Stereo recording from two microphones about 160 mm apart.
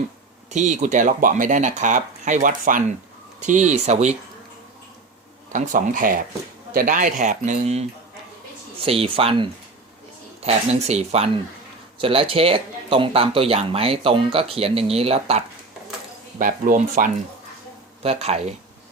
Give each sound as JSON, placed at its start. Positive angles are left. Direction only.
{"t": 0.5, "sound": "speech", "side_deg": -50}
{"t": 5.5, "sound": "speech", "side_deg": -55}
{"t": 16.4, "sound": "speech", "side_deg": -55}
{"t": 18.0, "sound": "speech", "side_deg": -40}